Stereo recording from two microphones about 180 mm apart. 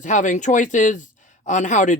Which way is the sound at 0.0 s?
45° left (ahead or behind).